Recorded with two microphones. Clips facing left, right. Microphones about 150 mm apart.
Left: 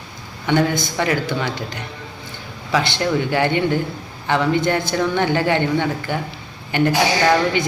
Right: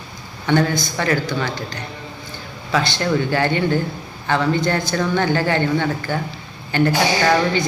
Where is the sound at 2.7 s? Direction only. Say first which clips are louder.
Even; 20° left (ahead or behind).